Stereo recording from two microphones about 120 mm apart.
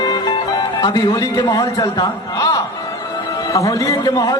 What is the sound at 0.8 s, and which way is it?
A man's voice, 30° left (ahead or behind).